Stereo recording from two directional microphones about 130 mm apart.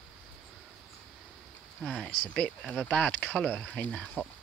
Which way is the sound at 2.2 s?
10° left (ahead or behind).